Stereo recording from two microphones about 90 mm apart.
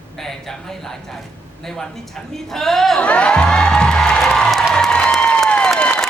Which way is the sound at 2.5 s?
5° left (ahead or behind).